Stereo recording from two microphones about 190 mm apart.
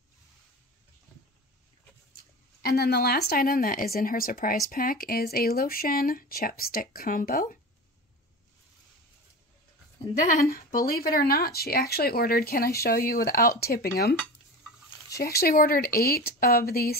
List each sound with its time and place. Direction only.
2.6 s speech: 55° left (ahead or behind)
10.1 s speech: 45° left (ahead or behind)
15.1 s speech: 55° left (ahead or behind)